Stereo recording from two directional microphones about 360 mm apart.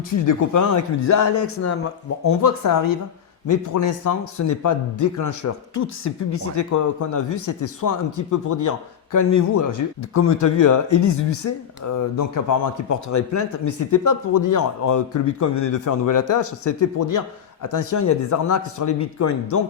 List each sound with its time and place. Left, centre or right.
0.1 s speech: left